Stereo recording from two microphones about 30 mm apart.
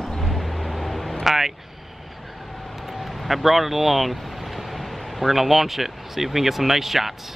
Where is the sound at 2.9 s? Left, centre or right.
Centre.